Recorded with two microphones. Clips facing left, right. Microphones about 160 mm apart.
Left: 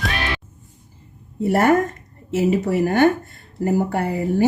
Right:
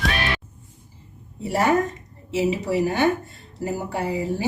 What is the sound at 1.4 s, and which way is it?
A woman's voice, 55° left (ahead or behind).